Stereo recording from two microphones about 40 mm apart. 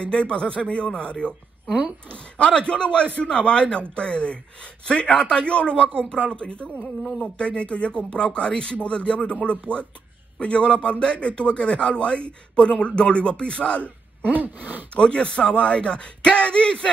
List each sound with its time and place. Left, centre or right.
0.0 s a man's voice: left
14.3 s gasp: right
15.0 s a man's voice: left